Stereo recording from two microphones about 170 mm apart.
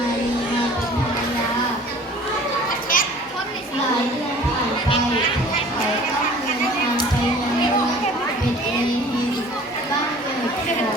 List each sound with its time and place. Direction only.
2.9 s children playing: 55° left (ahead or behind)